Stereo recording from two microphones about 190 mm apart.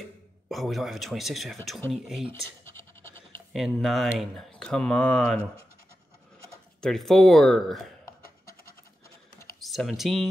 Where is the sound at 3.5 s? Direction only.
Centre (ahead or behind).